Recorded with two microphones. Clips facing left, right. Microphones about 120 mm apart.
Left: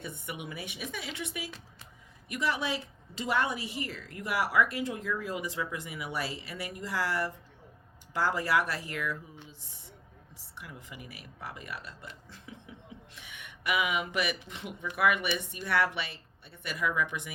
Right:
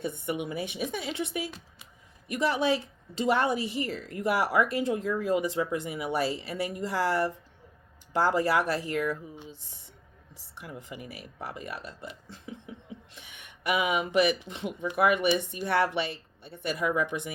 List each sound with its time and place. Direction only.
0.0 s a woman's voice: 25° right (ahead or behind)
10.3 s a woman's voice: 30° right (ahead or behind)
13.1 s a woman's voice: 30° right (ahead or behind)